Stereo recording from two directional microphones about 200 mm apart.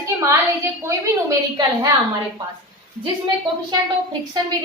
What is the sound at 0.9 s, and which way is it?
A woman's voice, 15° right (ahead or behind).